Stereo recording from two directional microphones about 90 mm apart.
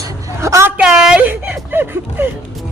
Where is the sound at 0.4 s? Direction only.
35° right (ahead or behind).